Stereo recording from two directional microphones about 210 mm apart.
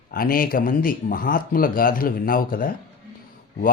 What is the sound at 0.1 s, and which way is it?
Speech, 45° left (ahead or behind).